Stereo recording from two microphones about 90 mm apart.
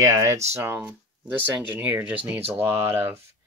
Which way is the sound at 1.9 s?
20° right (ahead or behind).